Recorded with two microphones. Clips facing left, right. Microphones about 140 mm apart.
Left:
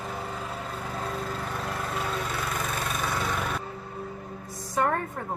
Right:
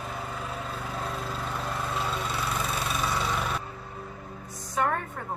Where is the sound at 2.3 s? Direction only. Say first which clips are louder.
Even; 50° left (ahead or behind).